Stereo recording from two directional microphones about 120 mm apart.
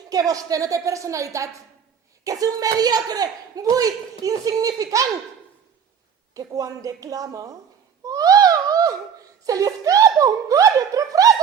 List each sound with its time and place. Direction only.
0.1 s speech: 30° right (ahead or behind)
6.3 s speech: 30° right (ahead or behind)
8.0 s a sound: 30° right (ahead or behind)
9.5 s speech: 30° right (ahead or behind)